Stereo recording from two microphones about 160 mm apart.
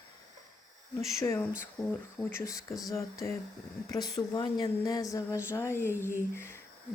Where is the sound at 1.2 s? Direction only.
20° left (ahead or behind).